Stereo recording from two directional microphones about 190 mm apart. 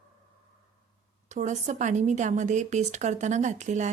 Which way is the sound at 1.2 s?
40° right (ahead or behind).